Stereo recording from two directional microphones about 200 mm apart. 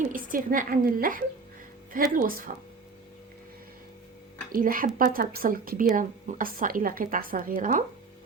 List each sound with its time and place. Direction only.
0.1 s a woman's voice: 40° right (ahead or behind)
4.5 s a woman's voice: 45° right (ahead or behind)